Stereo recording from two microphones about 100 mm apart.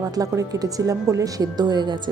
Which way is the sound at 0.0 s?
35° right (ahead or behind).